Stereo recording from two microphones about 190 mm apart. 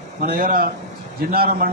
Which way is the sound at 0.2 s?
50° right (ahead or behind).